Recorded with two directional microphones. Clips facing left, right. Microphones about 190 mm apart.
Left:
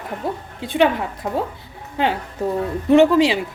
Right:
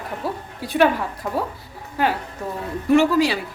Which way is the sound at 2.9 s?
20° left (ahead or behind).